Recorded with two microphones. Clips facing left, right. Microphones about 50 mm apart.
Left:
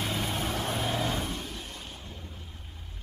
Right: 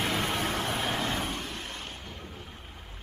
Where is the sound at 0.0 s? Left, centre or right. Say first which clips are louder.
Right 3 dB; right.